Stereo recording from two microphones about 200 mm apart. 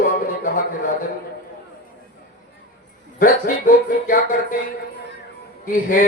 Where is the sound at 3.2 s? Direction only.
45° left (ahead or behind).